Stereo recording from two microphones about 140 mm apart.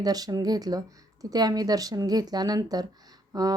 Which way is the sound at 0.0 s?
25° right (ahead or behind).